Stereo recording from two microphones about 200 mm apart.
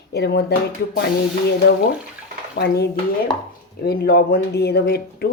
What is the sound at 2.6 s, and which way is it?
Speech, 55° left (ahead or behind).